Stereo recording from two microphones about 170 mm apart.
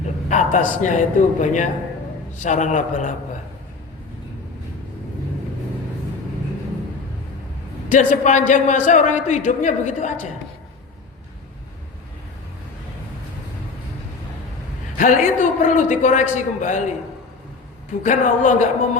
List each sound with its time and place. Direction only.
0.3 s a man's voice: 45° left (ahead or behind)
7.9 s a man's voice: 45° left (ahead or behind)
14.9 s a man's voice: 50° left (ahead or behind)
18.0 s a man's voice: 45° left (ahead or behind)